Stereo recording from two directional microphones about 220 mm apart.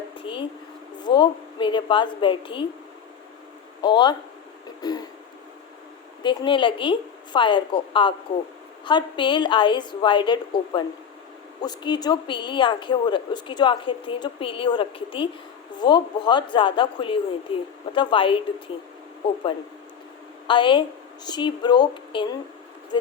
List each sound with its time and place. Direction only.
0.2 s a sound: 25° left (ahead or behind)
0.9 s a woman's voice: 20° left (ahead or behind)
3.8 s a woman's voice: 20° left (ahead or behind)
4.8 s throat clearing: 20° left (ahead or behind)
6.2 s a woman's voice: 20° left (ahead or behind)
20.5 s a woman's voice: 20° left (ahead or behind)